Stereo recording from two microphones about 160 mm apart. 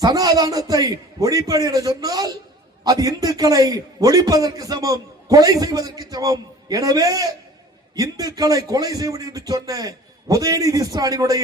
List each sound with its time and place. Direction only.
0.0 s a man's voice: 20° right (ahead or behind)